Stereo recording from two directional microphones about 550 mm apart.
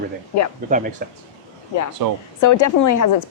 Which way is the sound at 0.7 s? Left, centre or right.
Centre.